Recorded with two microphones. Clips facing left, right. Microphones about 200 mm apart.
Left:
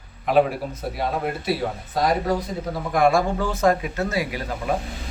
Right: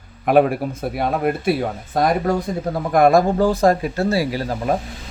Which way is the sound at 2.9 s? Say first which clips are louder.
Right 5 dB; 40° right (ahead or behind).